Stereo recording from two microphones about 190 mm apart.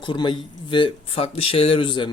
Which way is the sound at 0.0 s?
25° left (ahead or behind).